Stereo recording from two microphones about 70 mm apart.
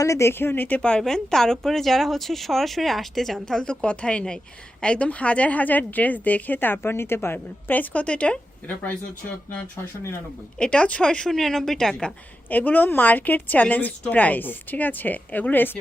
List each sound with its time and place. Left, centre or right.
0.0 s speech: left
0.8 s a woman's voice: centre; by 7.3 s left
7.3 s a woman's voice: left
10.6 s a woman's voice: centre
12.5 s a woman's voice: left